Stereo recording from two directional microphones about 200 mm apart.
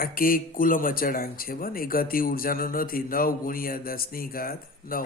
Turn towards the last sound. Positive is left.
turn(degrees=45)  # may be behind; listen again after turning